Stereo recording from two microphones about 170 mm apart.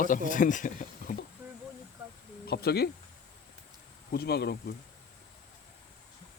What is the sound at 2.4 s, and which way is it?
Speech, 70° left (ahead or behind).